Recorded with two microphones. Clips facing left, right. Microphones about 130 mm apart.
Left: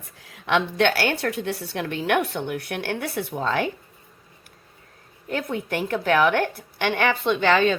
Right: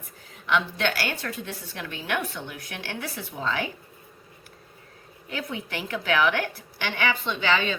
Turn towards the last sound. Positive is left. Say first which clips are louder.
# left 6 dB
turn(degrees=50)  # may be behind; listen again after turning